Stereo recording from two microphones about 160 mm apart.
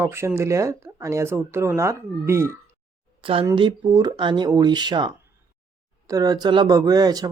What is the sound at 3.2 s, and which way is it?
Speech, 35° right (ahead or behind).